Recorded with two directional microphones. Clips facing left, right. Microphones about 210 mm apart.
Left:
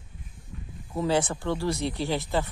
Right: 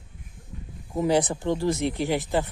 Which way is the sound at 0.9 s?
15° right (ahead or behind).